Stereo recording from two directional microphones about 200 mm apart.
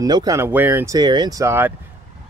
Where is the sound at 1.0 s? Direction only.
20° right (ahead or behind).